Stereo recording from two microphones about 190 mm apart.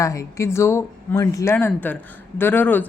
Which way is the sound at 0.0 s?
15° left (ahead or behind).